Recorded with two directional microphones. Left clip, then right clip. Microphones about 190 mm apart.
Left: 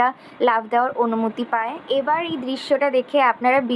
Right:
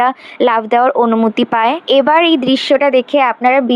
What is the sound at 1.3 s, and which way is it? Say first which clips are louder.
Speech: right 10 dB; 40° right (ahead or behind).